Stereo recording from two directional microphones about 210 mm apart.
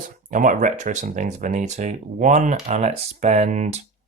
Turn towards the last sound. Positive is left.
turn(degrees=-35)  # may be behind; listen again after turning